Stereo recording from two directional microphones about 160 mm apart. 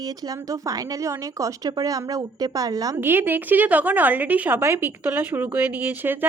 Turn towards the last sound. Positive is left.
turn(degrees=-10)  # may be behind; listen again after turning